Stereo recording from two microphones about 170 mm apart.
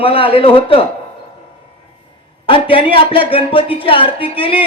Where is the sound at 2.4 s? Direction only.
30° left (ahead or behind).